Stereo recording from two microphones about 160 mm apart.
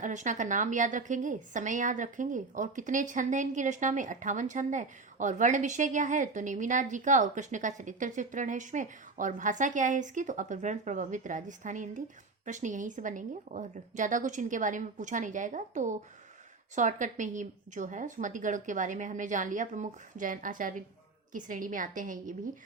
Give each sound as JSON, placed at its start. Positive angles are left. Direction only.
{"t": 0.0, "sound": "a woman's voice", "side_deg": -50}